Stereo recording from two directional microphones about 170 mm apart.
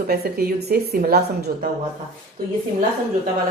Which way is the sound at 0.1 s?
65° right (ahead or behind).